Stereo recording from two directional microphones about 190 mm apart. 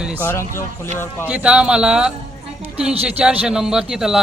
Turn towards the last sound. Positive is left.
turn(degrees=0)  # may be behind; listen again after turning